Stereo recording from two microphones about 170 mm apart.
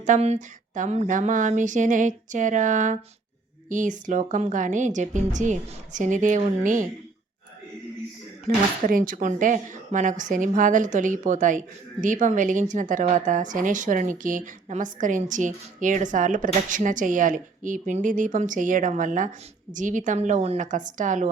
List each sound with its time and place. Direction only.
0.0 s speech: 45° right (ahead or behind)
8.4 s speech: 55° right (ahead or behind)